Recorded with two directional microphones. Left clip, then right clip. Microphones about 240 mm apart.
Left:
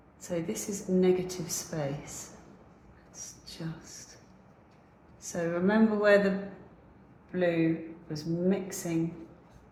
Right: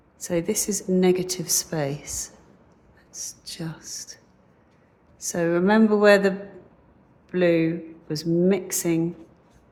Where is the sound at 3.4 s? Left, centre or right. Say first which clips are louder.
Right 7 dB; right.